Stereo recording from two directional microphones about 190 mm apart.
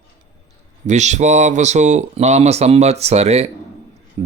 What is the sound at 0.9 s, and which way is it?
Speech, 40° right (ahead or behind).